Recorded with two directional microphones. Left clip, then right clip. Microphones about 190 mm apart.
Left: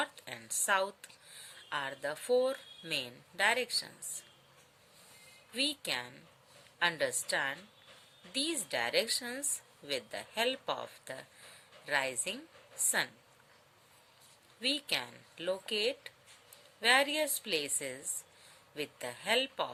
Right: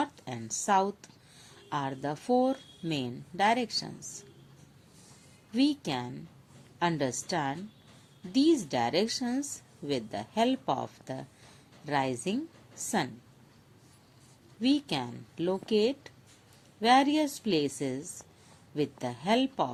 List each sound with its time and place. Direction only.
0.0 s a sound: 40° right (ahead or behind)
0.6 s speech: 40° right (ahead or behind)
5.5 s speech: 40° right (ahead or behind)
14.6 s speech: 40° right (ahead or behind)